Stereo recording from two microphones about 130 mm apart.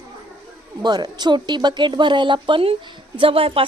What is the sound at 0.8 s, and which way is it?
A woman's voice, 30° right (ahead or behind).